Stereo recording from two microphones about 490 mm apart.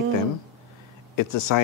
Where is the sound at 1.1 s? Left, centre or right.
Left.